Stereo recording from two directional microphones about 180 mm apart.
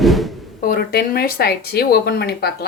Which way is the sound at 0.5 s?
55° left (ahead or behind).